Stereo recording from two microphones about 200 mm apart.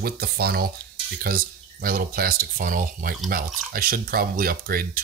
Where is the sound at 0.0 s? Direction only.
50° right (ahead or behind).